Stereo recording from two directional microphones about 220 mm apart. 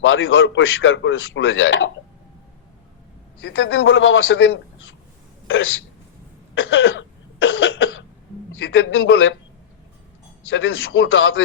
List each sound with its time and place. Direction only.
0.0 s a man's voice: 60° left (ahead or behind)
3.4 s a man's voice: 65° left (ahead or behind)
6.5 s cough: 60° left (ahead or behind)
8.5 s a man's voice: 60° left (ahead or behind)
10.4 s a man's voice: 60° left (ahead or behind)